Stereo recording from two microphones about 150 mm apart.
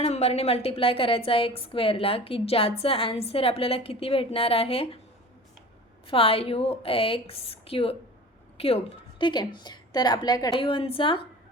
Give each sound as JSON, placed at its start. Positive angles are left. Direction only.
{"t": 0.0, "sound": "a woman's voice", "side_deg": 45}
{"t": 6.1, "sound": "a woman's voice", "side_deg": 40}